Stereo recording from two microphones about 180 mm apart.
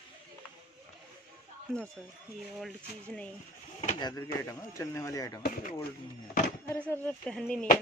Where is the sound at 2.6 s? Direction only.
5° left (ahead or behind).